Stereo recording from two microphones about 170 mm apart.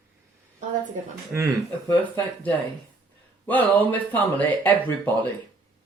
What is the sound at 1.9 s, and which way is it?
Speech, 10° left (ahead or behind).